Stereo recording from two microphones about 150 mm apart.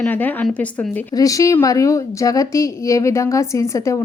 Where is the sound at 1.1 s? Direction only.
20° left (ahead or behind).